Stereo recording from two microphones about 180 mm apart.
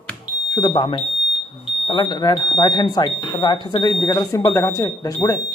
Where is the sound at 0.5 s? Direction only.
25° left (ahead or behind).